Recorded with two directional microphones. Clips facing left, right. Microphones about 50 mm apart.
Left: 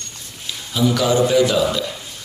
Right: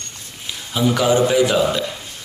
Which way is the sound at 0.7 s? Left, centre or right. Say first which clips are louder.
Right 1 dB; right.